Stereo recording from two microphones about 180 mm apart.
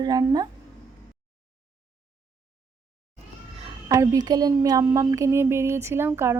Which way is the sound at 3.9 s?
20° right (ahead or behind).